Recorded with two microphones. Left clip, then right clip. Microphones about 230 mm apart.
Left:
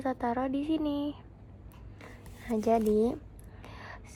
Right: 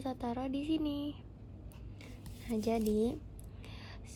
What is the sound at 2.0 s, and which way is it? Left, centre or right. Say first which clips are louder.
Zipper: left 5 dB; left.